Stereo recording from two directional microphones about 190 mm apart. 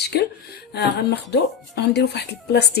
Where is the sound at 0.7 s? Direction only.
60° left (ahead or behind).